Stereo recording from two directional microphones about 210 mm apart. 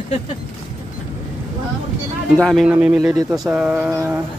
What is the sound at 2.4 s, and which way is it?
Speech, centre (ahead or behind).